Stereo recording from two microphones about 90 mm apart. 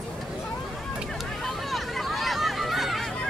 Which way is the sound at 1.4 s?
Centre (ahead or behind).